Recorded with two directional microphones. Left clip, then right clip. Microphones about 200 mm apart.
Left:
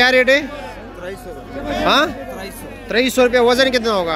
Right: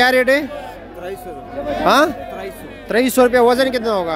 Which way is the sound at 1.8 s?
20° right (ahead or behind).